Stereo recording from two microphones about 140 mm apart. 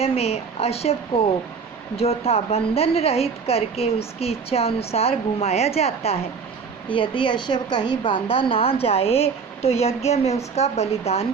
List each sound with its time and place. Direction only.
0.0 s a woman's voice: 45° left (ahead or behind)
6.8 s a woman's voice: 35° left (ahead or behind)